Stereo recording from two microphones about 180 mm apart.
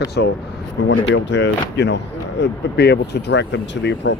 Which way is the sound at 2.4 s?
70° left (ahead or behind).